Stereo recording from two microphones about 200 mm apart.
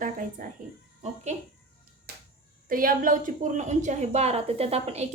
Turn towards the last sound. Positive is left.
turn(degrees=-30)  # may be behind; listen again after turning